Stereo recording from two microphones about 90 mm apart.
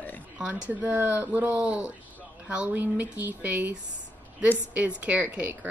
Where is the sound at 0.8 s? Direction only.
20° right (ahead or behind).